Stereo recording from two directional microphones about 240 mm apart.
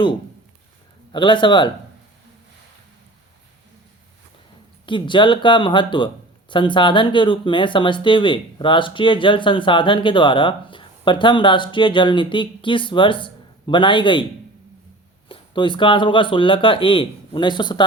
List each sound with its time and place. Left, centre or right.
1.1 s speech: centre
4.9 s speech: centre
15.3 s speech: centre